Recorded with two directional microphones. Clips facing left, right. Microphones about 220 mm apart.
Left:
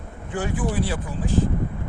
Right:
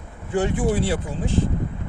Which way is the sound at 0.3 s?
25° right (ahead or behind).